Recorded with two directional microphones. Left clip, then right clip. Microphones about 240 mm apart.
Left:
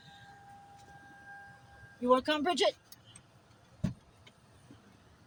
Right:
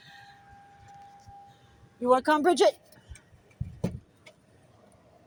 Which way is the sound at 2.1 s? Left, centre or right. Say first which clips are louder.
Right 6 dB; right.